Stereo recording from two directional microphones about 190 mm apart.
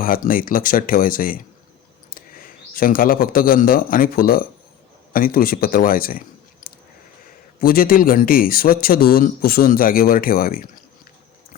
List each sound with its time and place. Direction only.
0.0 s speech: 50° left (ahead or behind)
7.6 s speech: 50° left (ahead or behind)